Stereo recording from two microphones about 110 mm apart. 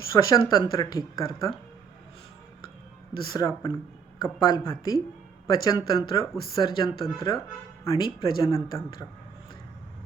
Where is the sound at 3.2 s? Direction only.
45° left (ahead or behind).